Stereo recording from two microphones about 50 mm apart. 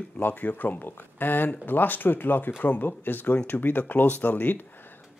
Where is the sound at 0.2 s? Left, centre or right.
Left.